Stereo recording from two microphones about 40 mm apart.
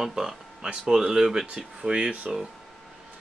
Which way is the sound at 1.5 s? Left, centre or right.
Right.